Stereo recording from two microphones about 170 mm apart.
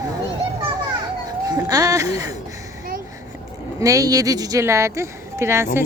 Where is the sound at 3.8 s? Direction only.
20° right (ahead or behind).